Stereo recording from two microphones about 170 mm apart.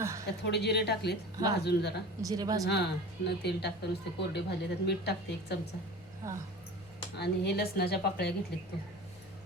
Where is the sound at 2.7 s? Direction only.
75° left (ahead or behind).